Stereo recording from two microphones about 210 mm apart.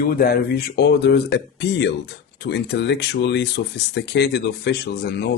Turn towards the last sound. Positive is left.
turn(degrees=50)  # may be behind; listen again after turning